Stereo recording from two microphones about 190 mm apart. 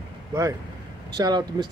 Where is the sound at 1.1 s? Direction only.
20° right (ahead or behind).